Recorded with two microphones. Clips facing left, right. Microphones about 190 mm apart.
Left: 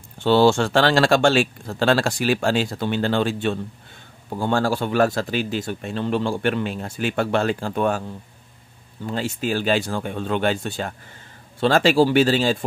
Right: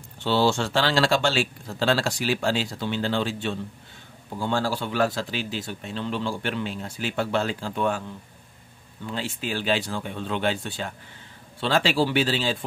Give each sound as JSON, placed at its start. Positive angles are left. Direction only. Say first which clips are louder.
{"t": 0.2, "sound": "speech", "louder": "left 6 dB", "side_deg": 50}
{"t": 9.0, "sound": "speech", "louder": "left 6 dB", "side_deg": 45}